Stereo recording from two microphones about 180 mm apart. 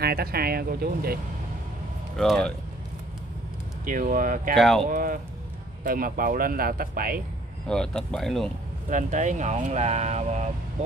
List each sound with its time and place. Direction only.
0.0 s speech: 60° right (ahead or behind)
2.1 s speech: 5° left (ahead or behind)
3.8 s speech: 50° right (ahead or behind)
4.6 s speech: centre (ahead or behind)
4.8 s speech: 50° right (ahead or behind)
7.6 s speech: 5° left (ahead or behind)
8.8 s speech: 45° right (ahead or behind)